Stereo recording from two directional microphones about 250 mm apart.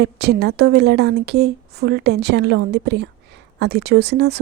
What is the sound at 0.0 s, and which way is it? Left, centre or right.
A woman's voice, right.